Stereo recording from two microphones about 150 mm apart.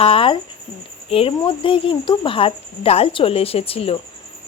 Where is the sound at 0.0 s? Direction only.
40° left (ahead or behind).